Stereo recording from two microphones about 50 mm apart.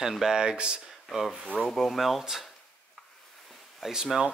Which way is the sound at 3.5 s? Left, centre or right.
Centre.